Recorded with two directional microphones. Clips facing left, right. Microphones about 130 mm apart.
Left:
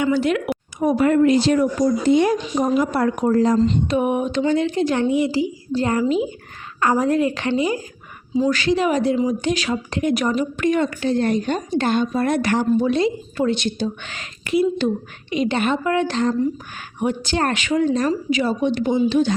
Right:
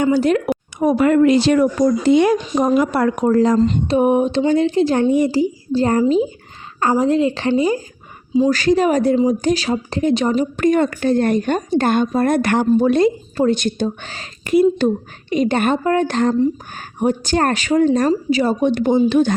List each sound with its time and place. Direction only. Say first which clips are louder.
0.0 s speech: right 4 dB; 40° right (ahead or behind)
0.8 s speech: right 2 dB; 85° right
3.8 s speech: right 5 dB; 35° right (ahead or behind)
5.1 s a woman's voice: right 4 dB; 45° right (ahead or behind)
6.9 s a woman's voice: right 3 dB; 25° right (ahead or behind)
10.6 s a woman's voice: right 5 dB; 45° right (ahead or behind)
13.3 s a woman's voice: right 4 dB; 40° right (ahead or behind)
14.1 s speech: right 2 dB; 35° right (ahead or behind)
14.5 s a woman's voice: right 5 dB; 50° right (ahead or behind)
18.1 s speech: right 4 dB; 35° right (ahead or behind)
18.6 s a woman's voice: right 4 dB; 50° right (ahead or behind)